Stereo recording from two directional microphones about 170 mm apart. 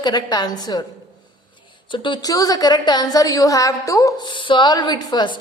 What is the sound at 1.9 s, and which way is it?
A woman's voice, 30° left (ahead or behind).